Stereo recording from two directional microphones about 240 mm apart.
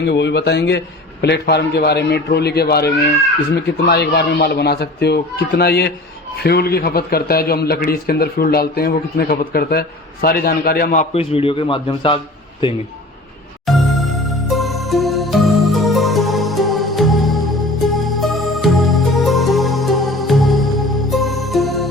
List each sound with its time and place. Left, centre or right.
0.1 s a man's voice: left
11.1 s speech: left
13.7 s music: centre